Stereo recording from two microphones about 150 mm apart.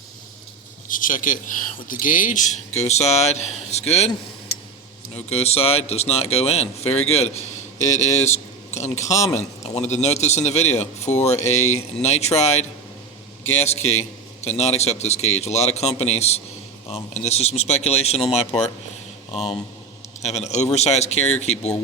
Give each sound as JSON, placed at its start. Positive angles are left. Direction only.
{"t": 0.9, "sound": "a man's voice", "side_deg": 60}
{"t": 5.1, "sound": "a man's voice", "side_deg": 45}
{"t": 8.3, "sound": "a sound", "side_deg": 50}
{"t": 9.3, "sound": "a man's voice", "side_deg": 45}
{"t": 20.2, "sound": "a man's voice", "side_deg": 45}